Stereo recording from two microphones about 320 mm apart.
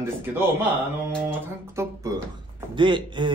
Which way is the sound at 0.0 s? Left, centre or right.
Centre.